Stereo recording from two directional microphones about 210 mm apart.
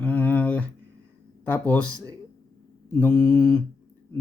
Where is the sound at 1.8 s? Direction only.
15° right (ahead or behind).